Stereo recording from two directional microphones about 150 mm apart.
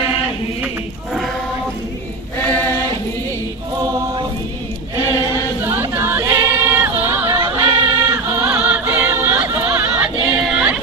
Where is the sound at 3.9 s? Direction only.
30° right (ahead or behind).